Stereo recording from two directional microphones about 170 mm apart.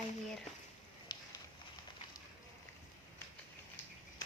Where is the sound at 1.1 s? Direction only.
25° left (ahead or behind).